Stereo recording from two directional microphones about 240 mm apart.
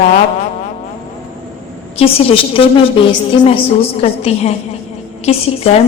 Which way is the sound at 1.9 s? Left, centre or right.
Left.